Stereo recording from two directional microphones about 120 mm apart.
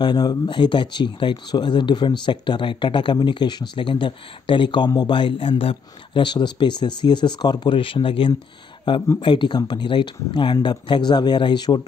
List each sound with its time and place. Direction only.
0.0 s speech: 35° left (ahead or behind)